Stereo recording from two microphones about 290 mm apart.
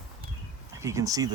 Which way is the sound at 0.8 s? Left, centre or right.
Centre.